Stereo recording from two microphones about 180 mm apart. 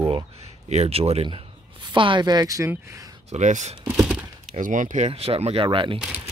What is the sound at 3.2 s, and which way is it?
Speech, 40° right (ahead or behind).